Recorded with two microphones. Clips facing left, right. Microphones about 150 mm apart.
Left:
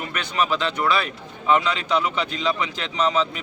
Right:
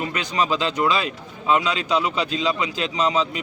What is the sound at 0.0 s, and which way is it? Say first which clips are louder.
A man's voice: right 1 dB; 15° right (ahead or behind).